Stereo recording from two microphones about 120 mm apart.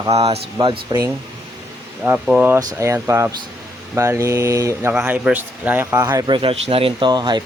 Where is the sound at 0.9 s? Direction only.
30° right (ahead or behind).